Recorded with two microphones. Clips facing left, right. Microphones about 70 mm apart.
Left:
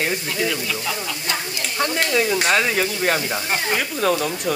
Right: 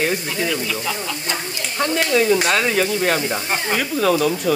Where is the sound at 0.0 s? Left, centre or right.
Centre.